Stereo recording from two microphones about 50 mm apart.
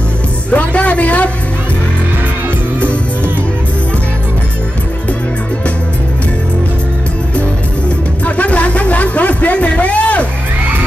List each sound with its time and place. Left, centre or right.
0.5 s music: left
8.4 s music: left